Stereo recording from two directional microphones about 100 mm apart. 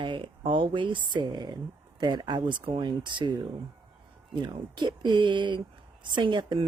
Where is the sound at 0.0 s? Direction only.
55° right (ahead or behind).